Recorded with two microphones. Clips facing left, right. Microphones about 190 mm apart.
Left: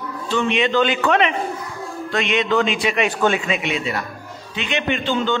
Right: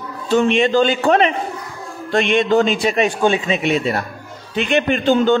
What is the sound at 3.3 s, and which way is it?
A man's voice, 30° right (ahead or behind).